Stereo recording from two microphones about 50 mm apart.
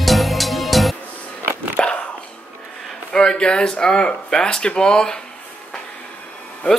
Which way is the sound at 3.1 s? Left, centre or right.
Centre.